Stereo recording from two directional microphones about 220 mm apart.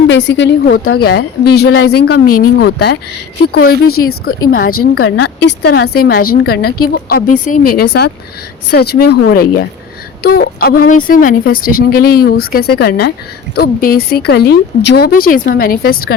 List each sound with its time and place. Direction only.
0.1 s speech: 55° left (ahead or behind)
4.0 s a woman's voice: 55° left (ahead or behind)
7.3 s a woman's voice: 90° left
9.0 s speech: 45° left (ahead or behind)